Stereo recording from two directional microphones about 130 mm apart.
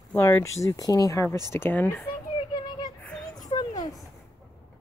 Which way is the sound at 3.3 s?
30° left (ahead or behind).